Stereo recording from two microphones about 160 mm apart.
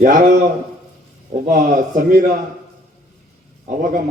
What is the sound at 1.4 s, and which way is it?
Speech, 55° right (ahead or behind).